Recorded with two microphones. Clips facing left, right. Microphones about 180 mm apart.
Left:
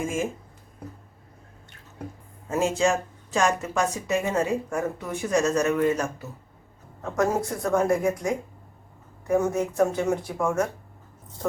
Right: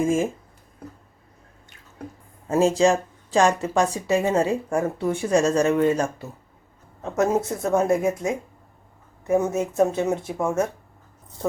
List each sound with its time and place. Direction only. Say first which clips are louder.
2.5 s speech: right 5 dB; 35° right (ahead or behind)